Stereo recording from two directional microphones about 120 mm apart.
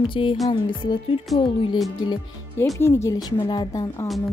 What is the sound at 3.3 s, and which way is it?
Speech, 40° left (ahead or behind).